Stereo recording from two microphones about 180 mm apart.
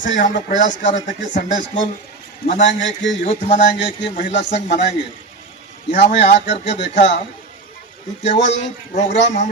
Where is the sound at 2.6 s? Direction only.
90° left.